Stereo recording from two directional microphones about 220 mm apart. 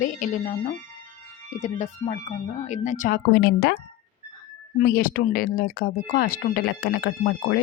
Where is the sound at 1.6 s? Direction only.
30° left (ahead or behind); by 3.7 s 50° left (ahead or behind).